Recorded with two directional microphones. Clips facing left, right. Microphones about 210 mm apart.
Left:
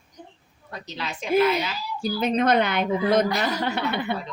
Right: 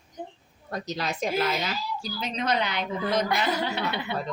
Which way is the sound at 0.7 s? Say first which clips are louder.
Right 3 dB; 40° right (ahead or behind).